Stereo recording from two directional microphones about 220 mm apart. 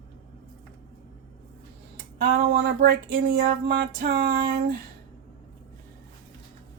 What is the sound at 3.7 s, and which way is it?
Speech, 45° right (ahead or behind).